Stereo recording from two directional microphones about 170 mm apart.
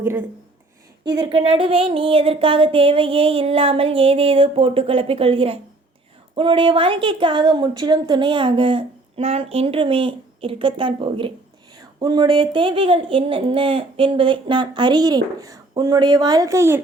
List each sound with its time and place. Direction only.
1.0 s speech: 25° right (ahead or behind)